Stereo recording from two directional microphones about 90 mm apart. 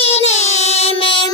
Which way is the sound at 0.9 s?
90° left.